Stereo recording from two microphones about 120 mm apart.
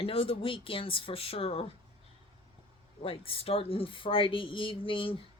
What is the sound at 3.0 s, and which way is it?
Speech, 50° left (ahead or behind).